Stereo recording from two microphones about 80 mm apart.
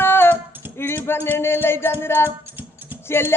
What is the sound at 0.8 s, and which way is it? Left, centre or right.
Female singing, left.